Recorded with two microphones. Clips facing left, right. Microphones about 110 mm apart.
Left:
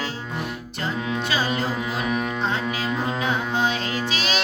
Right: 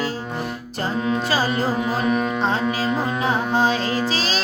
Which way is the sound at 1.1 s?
35° right (ahead or behind).